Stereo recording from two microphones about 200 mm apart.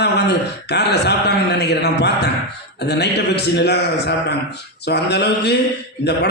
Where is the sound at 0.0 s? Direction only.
55° left (ahead or behind).